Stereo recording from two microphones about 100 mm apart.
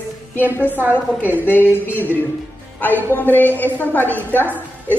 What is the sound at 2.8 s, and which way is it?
A woman's voice, 20° left (ahead or behind).